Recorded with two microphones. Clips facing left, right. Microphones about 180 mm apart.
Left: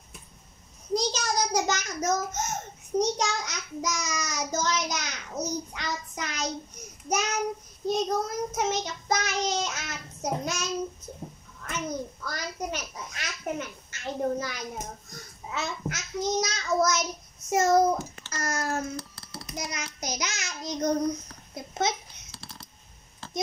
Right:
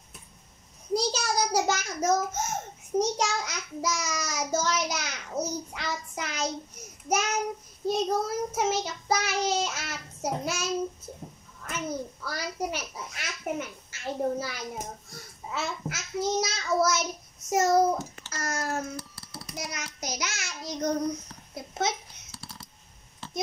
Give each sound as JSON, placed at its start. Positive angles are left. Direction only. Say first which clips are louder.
{"t": 0.9, "sound": "a child's voice", "louder": "even", "side_deg": -10}
{"t": 19.3, "sound": "child singing", "louder": "left 1 dB", "side_deg": -5}
{"t": 21.5, "sound": "a sound", "louder": "left 1 dB", "side_deg": -5}